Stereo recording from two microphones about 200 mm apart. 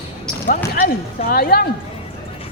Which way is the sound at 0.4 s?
45° left (ahead or behind).